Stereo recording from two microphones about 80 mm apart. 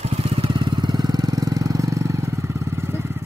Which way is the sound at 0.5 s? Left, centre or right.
Right.